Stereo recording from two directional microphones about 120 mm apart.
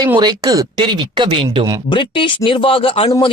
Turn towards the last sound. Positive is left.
turn(degrees=50)  # may be behind; listen again after turning